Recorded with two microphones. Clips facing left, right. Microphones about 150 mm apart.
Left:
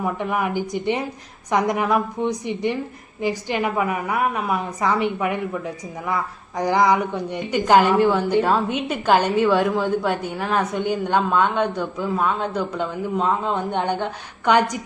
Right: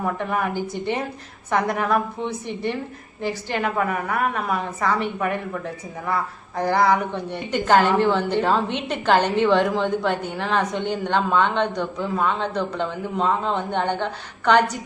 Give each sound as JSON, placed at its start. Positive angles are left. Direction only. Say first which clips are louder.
{"t": 0.0, "sound": "a woman's voice", "louder": "left 1 dB", "side_deg": 15}